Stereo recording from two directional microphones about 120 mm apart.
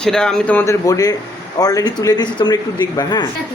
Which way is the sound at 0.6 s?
30° left (ahead or behind).